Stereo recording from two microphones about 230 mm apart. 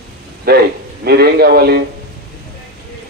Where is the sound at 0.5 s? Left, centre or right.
Right.